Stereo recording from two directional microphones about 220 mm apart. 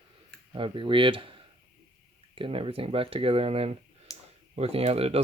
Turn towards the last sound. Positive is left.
turn(degrees=-25)  # may be behind; listen again after turning